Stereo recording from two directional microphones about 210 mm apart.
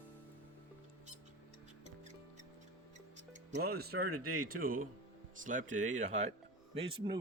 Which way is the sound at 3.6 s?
50° right (ahead or behind).